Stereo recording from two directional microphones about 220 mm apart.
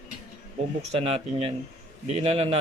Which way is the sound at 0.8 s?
30° right (ahead or behind).